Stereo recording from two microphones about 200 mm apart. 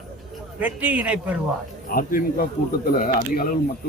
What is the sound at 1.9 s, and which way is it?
Speech, 45° left (ahead or behind).